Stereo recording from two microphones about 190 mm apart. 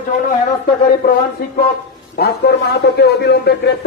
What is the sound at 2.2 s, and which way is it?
A man's voice, 60° left (ahead or behind).